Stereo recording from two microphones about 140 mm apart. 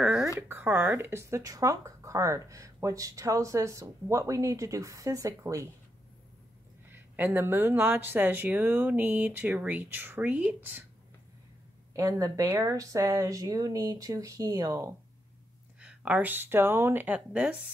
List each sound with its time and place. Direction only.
0.0 s a sound: 5° right (ahead or behind)
0.4 s speech: 15° right (ahead or behind)
6.9 s speech: 15° right (ahead or behind)
11.9 s speech: 20° right (ahead or behind)
15.8 s speech: 10° right (ahead or behind)